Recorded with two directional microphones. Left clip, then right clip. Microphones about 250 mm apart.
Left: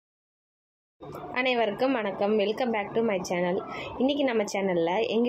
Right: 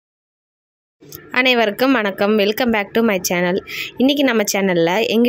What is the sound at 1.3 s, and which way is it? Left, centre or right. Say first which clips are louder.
A woman's voice: right 11 dB; right.